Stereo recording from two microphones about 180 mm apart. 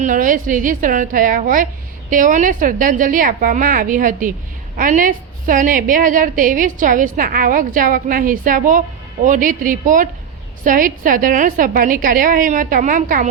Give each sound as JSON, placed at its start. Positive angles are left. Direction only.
{"t": 0.0, "sound": "a woman's voice", "side_deg": -50}